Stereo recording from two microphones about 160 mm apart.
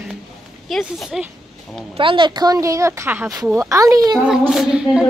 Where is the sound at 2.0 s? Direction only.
30° right (ahead or behind).